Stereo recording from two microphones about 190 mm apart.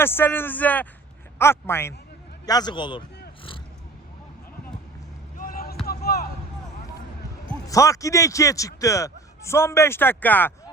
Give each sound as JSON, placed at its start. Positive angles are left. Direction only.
{"t": 0.0, "sound": "a man's voice", "side_deg": 10}
{"t": 5.4, "sound": "basketball bounce", "side_deg": 50}
{"t": 5.8, "sound": "a sound", "side_deg": 55}
{"t": 7.7, "sound": "a man's voice", "side_deg": 15}